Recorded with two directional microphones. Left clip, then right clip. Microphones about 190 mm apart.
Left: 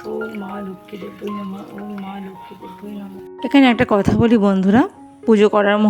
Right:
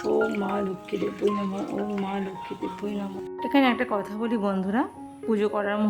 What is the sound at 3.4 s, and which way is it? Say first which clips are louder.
Speech: left 9 dB; 45° left (ahead or behind).